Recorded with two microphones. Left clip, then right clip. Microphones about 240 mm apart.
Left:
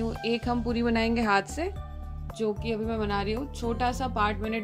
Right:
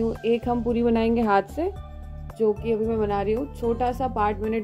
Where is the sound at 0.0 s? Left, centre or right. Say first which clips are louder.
Right 6 dB; left.